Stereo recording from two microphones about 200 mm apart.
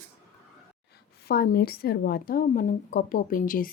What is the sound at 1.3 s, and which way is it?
A woman's voice, 50° left (ahead or behind).